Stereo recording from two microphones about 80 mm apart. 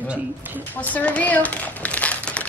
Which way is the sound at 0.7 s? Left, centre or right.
Centre.